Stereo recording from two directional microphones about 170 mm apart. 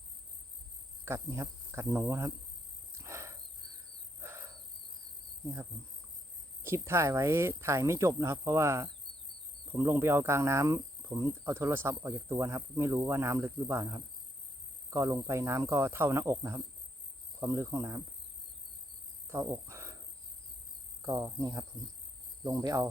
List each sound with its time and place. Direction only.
1.0 s insect: 15° right (ahead or behind)
3.0 s a sound: 15° right (ahead or behind)
4.2 s cricket: 15° right (ahead or behind)
6.6 s insect: 15° right (ahead or behind)
19.3 s cricket: 15° right (ahead or behind)
21.0 s cricket: 20° right (ahead or behind)